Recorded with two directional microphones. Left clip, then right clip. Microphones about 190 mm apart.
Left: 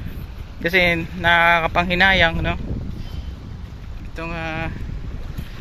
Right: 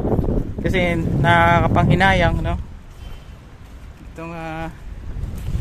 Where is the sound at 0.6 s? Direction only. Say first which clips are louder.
Left 4 dB; 15° right (ahead or behind).